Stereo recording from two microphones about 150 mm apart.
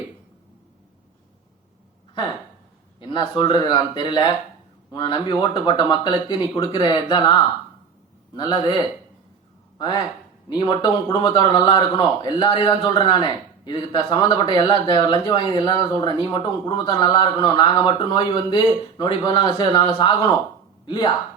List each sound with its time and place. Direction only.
3.0 s speech: 30° left (ahead or behind)
8.4 s speech: 30° left (ahead or behind)
9.7 s speech: 30° left (ahead or behind)